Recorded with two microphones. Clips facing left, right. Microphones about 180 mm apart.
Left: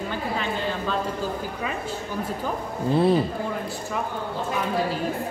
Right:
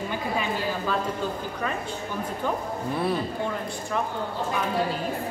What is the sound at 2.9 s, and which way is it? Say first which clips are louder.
Speech: left 7 dB; 30° left (ahead or behind).